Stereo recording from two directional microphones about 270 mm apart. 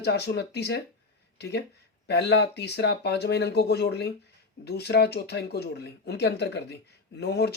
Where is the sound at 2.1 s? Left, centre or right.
Left.